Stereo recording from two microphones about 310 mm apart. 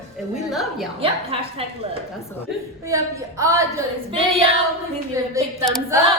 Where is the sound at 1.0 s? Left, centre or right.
Centre.